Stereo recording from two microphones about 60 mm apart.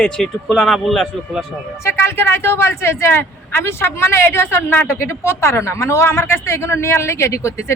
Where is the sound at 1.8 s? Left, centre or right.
Left.